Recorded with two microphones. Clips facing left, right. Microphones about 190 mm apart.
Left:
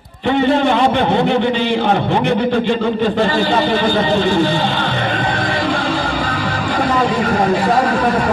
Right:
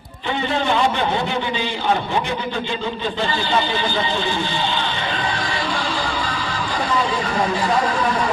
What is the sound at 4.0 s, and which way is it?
Music, 45° left (ahead or behind).